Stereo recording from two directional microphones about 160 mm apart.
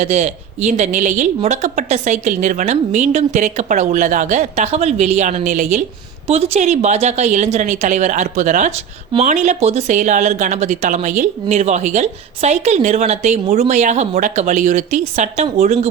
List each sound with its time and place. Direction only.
0.0 s speech: 45° right (ahead or behind)
6.2 s speech: 40° right (ahead or behind)